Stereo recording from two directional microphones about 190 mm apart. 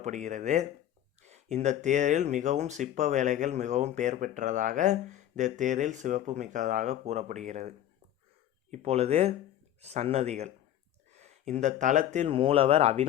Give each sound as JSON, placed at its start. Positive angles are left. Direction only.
{"t": 0.0, "sound": "speech", "side_deg": -40}
{"t": 8.7, "sound": "speech", "side_deg": -35}